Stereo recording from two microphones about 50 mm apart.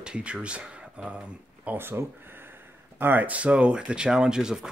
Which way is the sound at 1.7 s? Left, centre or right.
Right.